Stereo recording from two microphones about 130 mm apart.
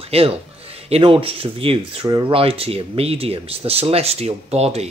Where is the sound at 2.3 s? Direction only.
45° right (ahead or behind).